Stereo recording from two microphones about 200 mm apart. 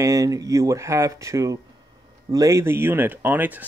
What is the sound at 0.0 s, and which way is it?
Speech, 15° right (ahead or behind).